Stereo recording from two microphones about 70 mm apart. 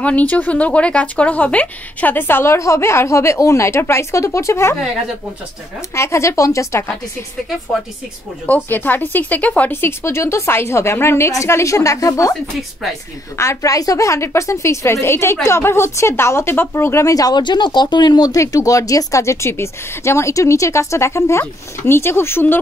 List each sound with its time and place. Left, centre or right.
0.0 s speech: left
5.9 s a woman's voice: left
8.5 s speech: left
9.7 s speech: left
13.4 s a woman's voice: left
17.1 s speech: left
18.3 s a woman's voice: left